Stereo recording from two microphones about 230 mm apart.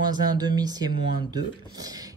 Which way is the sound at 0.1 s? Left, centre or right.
Centre.